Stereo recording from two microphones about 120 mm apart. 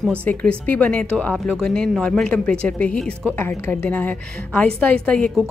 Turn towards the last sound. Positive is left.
turn(degrees=10)  # may be behind; listen again after turning